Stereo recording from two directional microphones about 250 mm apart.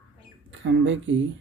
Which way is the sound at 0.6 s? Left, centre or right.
Right.